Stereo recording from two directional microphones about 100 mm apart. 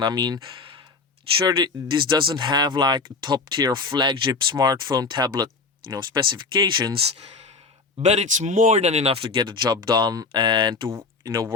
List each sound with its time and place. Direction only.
0.0 s speech: 45° right (ahead or behind)
1.5 s speech: 45° right (ahead or behind)
8.0 s speech: 90° right
9.4 s speech: 50° right (ahead or behind)
10.8 s speech: 30° right (ahead or behind)